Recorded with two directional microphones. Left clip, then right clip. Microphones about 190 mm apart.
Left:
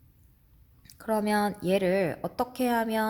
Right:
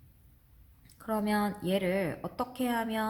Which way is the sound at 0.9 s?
45° left (ahead or behind).